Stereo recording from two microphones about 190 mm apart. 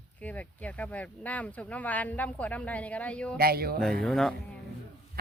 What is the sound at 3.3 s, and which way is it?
Speech, 55° right (ahead or behind).